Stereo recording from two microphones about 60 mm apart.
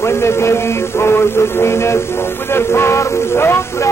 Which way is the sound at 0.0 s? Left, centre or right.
Left.